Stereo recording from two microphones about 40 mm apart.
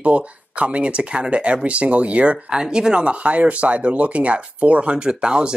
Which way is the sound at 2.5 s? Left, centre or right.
Centre.